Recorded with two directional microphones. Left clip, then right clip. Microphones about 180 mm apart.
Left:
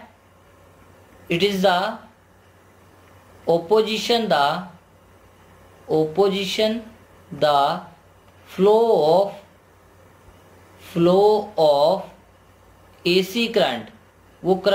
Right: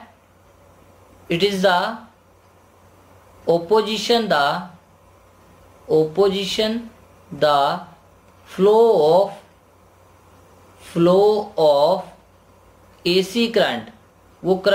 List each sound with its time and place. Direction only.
1.3 s speech: 10° right (ahead or behind)
3.4 s speech: 10° right (ahead or behind)
5.9 s speech: 10° right (ahead or behind)
10.8 s speech: 10° right (ahead or behind)
13.0 s speech: 10° right (ahead or behind)